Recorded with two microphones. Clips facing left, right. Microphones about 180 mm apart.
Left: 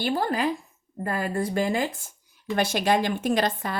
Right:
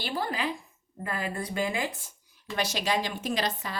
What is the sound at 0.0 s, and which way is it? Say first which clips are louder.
A woman's voice: left 6 dB; 50° left (ahead or behind).